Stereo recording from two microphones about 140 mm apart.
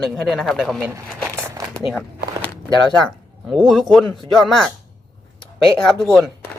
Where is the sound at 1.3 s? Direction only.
20° right (ahead or behind).